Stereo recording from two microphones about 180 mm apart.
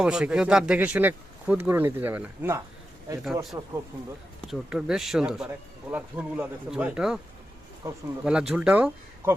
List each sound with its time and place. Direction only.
0.0 s speech: 5° right (ahead or behind)
4.4 s speech: centre (ahead or behind)
7.8 s speech: 15° right (ahead or behind)
8.2 s speech: 5° right (ahead or behind)